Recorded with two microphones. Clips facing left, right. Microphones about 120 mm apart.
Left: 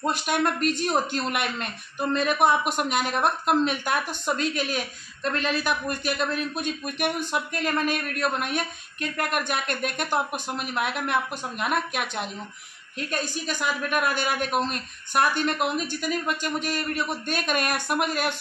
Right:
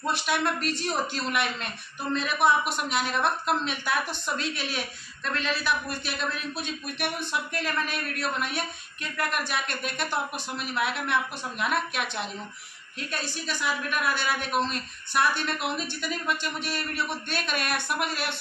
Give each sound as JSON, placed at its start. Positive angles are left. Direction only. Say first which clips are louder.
{"t": 0.0, "sound": "speech", "louder": "left 3 dB", "side_deg": 45}
{"t": 13.5, "sound": "speech", "louder": "left 2 dB", "side_deg": 50}